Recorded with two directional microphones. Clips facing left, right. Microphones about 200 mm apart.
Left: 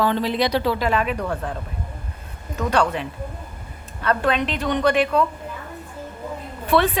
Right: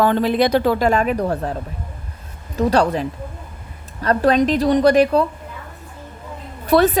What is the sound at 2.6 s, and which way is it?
A woman's voice, 35° right (ahead or behind).